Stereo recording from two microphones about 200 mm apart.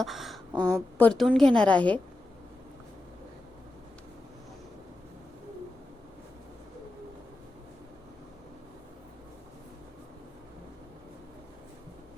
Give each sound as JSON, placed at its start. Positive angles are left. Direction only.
{"t": 0.0, "sound": "speech", "side_deg": 0}
{"t": 0.5, "sound": "a woman's voice", "side_deg": -20}
{"t": 0.9, "sound": "a woman's voice", "side_deg": 5}